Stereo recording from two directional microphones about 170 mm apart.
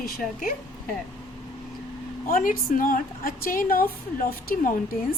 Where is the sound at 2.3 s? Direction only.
55° left (ahead or behind).